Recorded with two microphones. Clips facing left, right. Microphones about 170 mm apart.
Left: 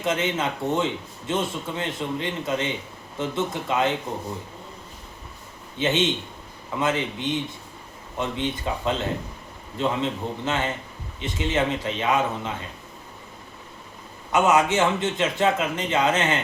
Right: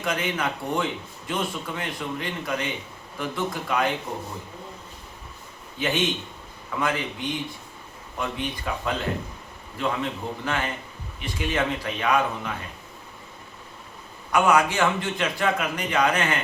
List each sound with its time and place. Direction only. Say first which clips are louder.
0.0 s a man's voice: left 2 dB; 25° left (ahead or behind)
5.7 s a man's voice: left 3 dB; 25° left (ahead or behind)
14.3 s a man's voice: left 1 dB; 20° left (ahead or behind)